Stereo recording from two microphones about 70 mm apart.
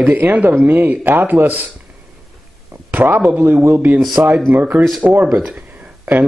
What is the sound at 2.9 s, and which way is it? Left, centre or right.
Speech, right.